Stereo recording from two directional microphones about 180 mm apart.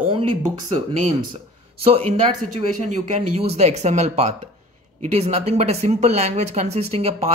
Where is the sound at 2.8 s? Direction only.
40° right (ahead or behind).